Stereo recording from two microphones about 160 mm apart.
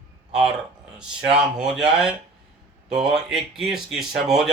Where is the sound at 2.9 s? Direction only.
Centre (ahead or behind).